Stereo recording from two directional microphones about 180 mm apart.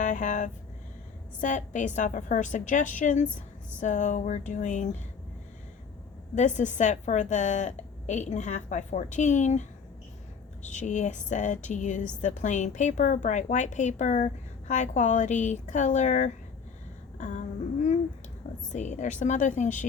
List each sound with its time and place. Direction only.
0.0 s speech: 45° left (ahead or behind)
6.3 s a woman's voice: 40° left (ahead or behind)
17.2 s a sound: 40° left (ahead or behind)
18.7 s a woman's voice: 40° left (ahead or behind)